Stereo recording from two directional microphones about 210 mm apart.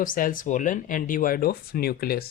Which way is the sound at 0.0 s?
40° left (ahead or behind).